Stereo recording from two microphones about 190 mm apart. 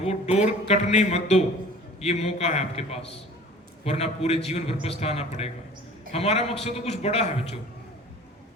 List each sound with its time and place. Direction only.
0.0 s a man's voice: 35° left (ahead or behind)